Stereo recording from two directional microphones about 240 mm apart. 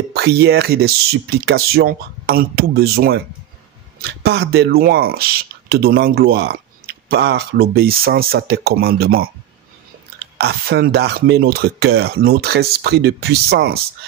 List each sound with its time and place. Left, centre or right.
0.1 s speech: right